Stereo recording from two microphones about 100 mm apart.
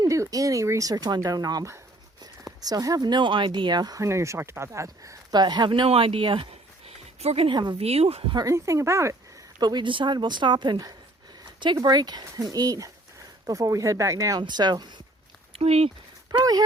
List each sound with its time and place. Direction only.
0.0 s speech: 35° right (ahead or behind)
5.3 s speech: 45° right (ahead or behind); by 7.5 s 90° right
7.5 s a woman's voice: 50° right (ahead or behind)
7.8 s speech: 90° right
8.4 s speech: 30° right (ahead or behind)
9.6 s a woman's voice: 45° right (ahead or behind)
14.4 s a woman's voice: 45° right (ahead or behind)
15.5 s speech: 90° right
16.4 s speech: 40° right (ahead or behind)